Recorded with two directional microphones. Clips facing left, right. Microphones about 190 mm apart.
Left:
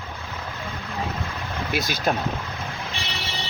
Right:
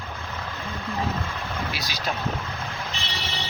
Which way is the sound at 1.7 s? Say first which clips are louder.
Left 7 dB; 55° left (ahead or behind).